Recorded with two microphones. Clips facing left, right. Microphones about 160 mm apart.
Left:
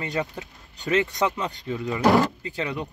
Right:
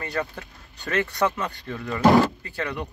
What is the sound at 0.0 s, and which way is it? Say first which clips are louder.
Speech: left 1 dB; 20° left (ahead or behind).